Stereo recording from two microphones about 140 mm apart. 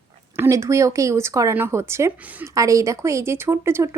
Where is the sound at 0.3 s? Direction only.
20° right (ahead or behind).